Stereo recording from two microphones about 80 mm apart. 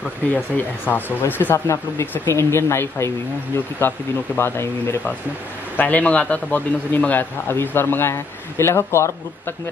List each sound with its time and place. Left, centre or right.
0.3 s a man's voice: left
1.7 s a man's voice: left
5.8 s a man's voice: centre; by 9.1 s left